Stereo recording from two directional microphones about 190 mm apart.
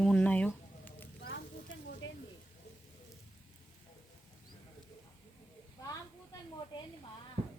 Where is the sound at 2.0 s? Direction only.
85° left.